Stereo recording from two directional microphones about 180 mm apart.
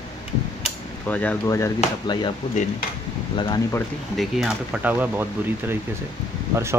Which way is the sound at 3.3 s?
25° left (ahead or behind).